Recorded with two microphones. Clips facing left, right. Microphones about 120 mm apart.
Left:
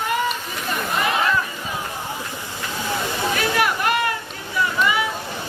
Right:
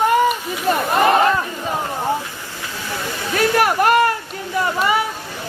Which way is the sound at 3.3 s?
45° right (ahead or behind).